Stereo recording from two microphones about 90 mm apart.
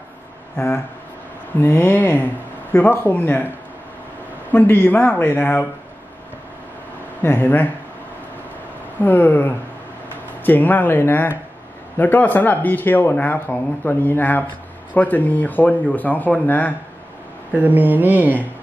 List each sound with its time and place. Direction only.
1.6 s speech: 25° left (ahead or behind)
4.5 s speech: 20° left (ahead or behind)
7.2 s speech: 20° left (ahead or behind)
9.0 s speech: 20° left (ahead or behind)
17.6 s speech: 20° right (ahead or behind)